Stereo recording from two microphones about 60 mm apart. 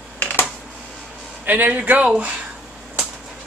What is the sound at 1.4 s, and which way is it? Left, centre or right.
Speech, right.